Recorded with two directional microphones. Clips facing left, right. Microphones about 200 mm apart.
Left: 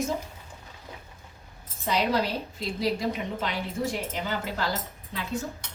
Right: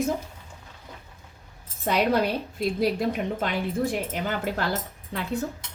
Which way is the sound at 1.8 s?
55° right (ahead or behind).